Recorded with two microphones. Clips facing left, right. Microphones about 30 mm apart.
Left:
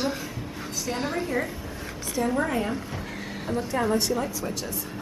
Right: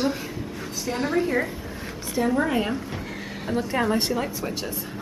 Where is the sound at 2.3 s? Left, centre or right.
Centre.